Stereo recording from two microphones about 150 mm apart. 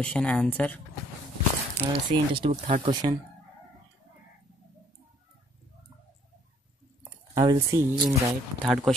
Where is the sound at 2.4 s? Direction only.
45° right (ahead or behind).